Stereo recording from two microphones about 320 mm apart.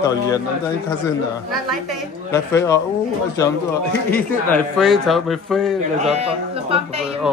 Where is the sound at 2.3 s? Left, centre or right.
Centre.